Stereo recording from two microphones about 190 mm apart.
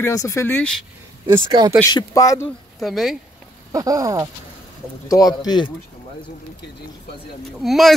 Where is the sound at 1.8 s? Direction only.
20° left (ahead or behind).